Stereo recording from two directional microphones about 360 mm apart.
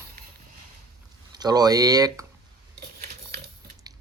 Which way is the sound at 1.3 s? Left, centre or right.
Centre.